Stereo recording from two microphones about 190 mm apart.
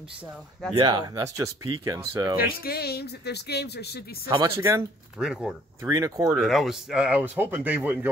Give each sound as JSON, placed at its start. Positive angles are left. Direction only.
{"t": 0.7, "sound": "speech", "side_deg": -20}
{"t": 2.4, "sound": "speech", "side_deg": 55}
{"t": 4.3, "sound": "speech", "side_deg": -20}
{"t": 5.2, "sound": "speech", "side_deg": -5}
{"t": 5.9, "sound": "speech", "side_deg": -20}
{"t": 6.3, "sound": "speech", "side_deg": 0}